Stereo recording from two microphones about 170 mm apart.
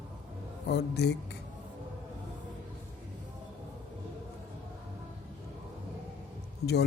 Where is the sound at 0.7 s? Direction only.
75° left (ahead or behind).